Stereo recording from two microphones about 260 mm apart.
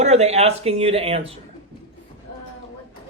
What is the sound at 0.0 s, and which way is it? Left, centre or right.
Speech, right.